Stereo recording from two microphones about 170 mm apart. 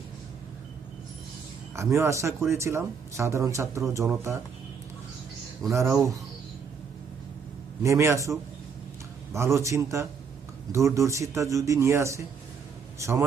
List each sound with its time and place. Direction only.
1.7 s speech: 15° right (ahead or behind)
5.7 s speech: 15° right (ahead or behind)
7.8 s speech: 15° right (ahead or behind)